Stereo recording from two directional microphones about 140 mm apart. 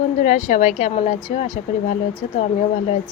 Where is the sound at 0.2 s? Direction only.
60° left (ahead or behind).